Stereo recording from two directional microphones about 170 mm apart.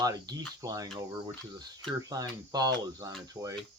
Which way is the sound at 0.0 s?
20° right (ahead or behind).